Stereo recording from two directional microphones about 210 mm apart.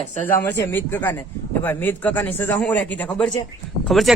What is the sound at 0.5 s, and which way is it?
A man's voice, 10° left (ahead or behind).